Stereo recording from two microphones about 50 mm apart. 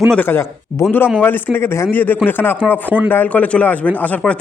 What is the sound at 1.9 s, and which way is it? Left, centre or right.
A man's voice, left.